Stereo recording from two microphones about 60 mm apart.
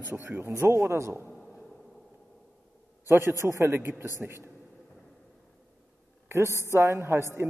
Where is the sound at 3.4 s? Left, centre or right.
Right.